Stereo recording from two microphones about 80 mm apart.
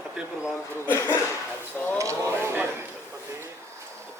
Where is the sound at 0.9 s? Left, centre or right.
Left.